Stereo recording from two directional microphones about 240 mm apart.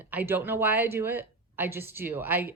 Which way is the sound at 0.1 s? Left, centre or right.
Centre.